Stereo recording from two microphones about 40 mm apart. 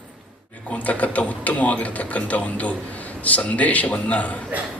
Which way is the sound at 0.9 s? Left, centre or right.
Left.